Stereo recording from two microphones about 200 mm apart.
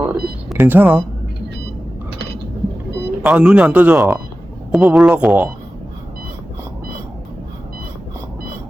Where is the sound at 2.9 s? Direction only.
60° right (ahead or behind).